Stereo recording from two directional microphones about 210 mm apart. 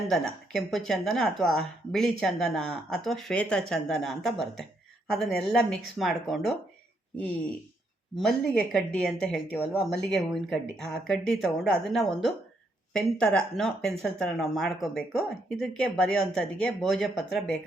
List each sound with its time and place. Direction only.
0.1 s a woman's voice: centre (ahead or behind)
8.1 s a woman's voice: centre (ahead or behind)